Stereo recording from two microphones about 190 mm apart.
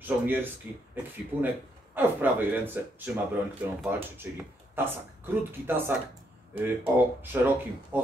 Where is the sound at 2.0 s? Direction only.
10° right (ahead or behind).